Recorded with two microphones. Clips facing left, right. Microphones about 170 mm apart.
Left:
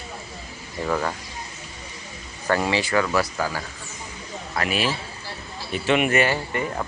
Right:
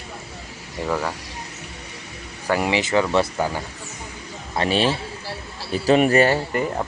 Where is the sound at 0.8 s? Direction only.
5° right (ahead or behind).